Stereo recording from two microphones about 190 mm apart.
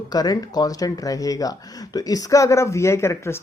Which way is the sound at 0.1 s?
20° left (ahead or behind).